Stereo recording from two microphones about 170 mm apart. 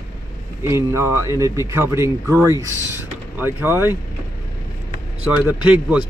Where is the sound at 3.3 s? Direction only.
10° right (ahead or behind).